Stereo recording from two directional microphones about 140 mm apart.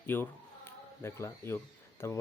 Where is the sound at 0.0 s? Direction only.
15° left (ahead or behind).